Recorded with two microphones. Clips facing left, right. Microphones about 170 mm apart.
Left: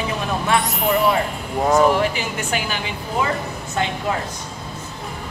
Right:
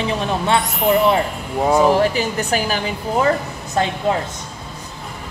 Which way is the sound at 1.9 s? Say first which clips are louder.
Right 4 dB; 40° right (ahead or behind).